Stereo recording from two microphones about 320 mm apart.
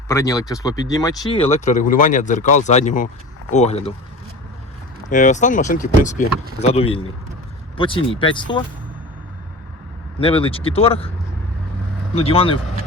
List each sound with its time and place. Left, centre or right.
0.1 s speech: centre
5.0 s speech: left
10.2 s speech: centre
12.1 s speech: centre